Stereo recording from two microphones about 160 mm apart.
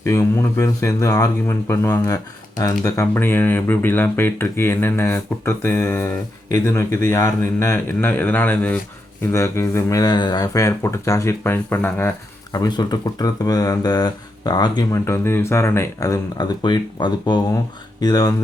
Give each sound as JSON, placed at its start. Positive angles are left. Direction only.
{"t": 0.0, "sound": "speech", "side_deg": 20}